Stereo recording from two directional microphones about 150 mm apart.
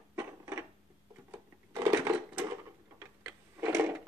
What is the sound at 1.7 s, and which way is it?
Crushing, 20° right (ahead or behind).